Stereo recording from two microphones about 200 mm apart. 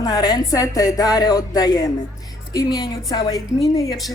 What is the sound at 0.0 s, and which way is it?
Speech, 20° left (ahead or behind).